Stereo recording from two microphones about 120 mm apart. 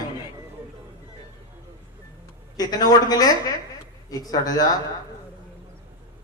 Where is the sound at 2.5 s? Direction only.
30° left (ahead or behind).